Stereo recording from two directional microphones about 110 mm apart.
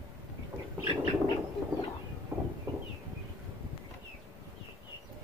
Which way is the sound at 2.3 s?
25° right (ahead or behind).